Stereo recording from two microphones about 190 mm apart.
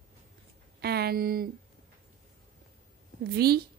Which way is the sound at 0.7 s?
55° right (ahead or behind).